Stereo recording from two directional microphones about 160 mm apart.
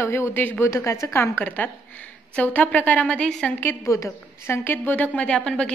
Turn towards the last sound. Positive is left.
turn(degrees=5)  # may be behind; listen again after turning